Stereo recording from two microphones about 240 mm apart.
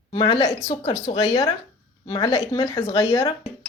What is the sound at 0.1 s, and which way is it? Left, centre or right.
A woman's voice, centre.